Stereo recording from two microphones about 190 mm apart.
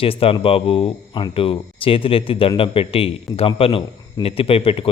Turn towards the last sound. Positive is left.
turn(degrees=30)  # may be behind; listen again after turning